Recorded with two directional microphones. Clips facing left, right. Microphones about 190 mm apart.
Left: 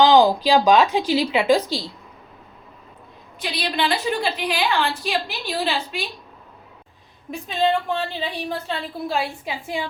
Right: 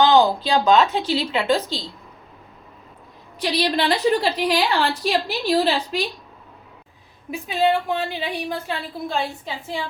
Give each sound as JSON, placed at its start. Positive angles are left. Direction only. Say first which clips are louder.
{"t": 0.0, "sound": "speech", "louder": "left 2 dB", "side_deg": 15}
{"t": 3.6, "sound": "a woman's voice", "louder": "right 3 dB", "side_deg": -40}
{"t": 7.3, "sound": "a woman's voice", "louder": "right 1 dB", "side_deg": -5}
{"t": 9.0, "sound": "speech", "louder": "left 1 dB", "side_deg": 5}